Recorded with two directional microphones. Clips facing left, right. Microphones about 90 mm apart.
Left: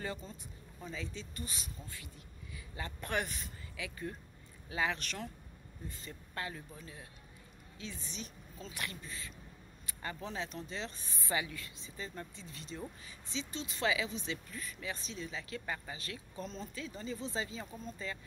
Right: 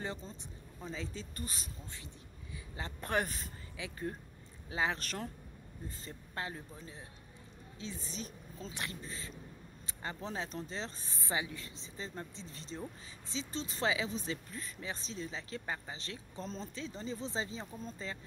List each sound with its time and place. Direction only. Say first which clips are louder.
0.8 s speech: right 1 dB; 35° right (ahead or behind)
2.7 s speech: right 2 dB; 30° right (ahead or behind)
11.2 s speech: left 1 dB; 20° right (ahead or behind)